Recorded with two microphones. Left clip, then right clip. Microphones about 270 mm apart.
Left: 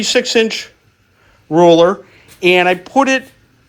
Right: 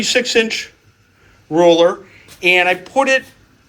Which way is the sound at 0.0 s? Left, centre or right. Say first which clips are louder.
Left 2 dB; centre.